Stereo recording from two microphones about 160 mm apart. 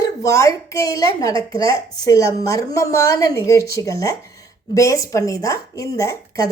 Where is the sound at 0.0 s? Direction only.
20° left (ahead or behind).